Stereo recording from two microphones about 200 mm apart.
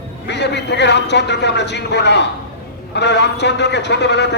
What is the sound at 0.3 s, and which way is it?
A man's voice, 60° left (ahead or behind).